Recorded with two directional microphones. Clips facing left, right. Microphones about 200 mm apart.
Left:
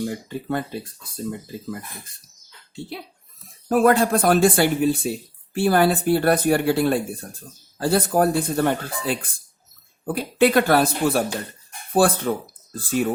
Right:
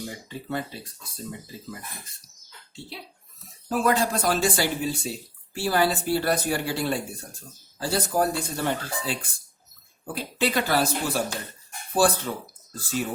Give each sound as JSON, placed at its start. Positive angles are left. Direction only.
{"t": 0.3, "sound": "speech", "side_deg": 55}
{"t": 3.7, "sound": "speech", "side_deg": 55}